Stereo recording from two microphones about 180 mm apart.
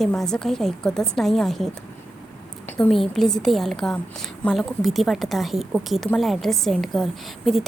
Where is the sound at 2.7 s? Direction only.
5° left (ahead or behind).